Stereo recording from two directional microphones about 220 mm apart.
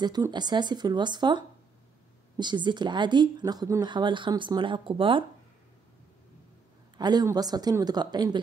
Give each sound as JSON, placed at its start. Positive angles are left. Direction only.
{"t": 0.0, "sound": "speech", "side_deg": -20}
{"t": 7.0, "sound": "speech", "side_deg": -20}